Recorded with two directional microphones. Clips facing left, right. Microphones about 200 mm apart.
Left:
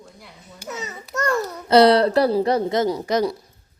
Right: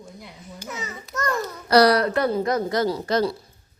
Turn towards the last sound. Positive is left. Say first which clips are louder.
# left 1 dB
turn(degrees=15)  # may be behind; listen again after turning